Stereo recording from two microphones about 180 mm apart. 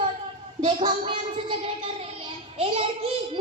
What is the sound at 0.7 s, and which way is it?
Speech, 25° right (ahead or behind).